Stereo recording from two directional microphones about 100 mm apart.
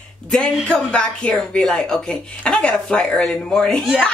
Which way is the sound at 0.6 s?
10° left (ahead or behind).